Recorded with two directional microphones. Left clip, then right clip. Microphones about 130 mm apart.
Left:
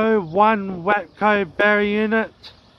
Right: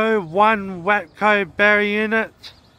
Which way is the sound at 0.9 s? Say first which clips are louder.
Right 1 dB; 50° right (ahead or behind).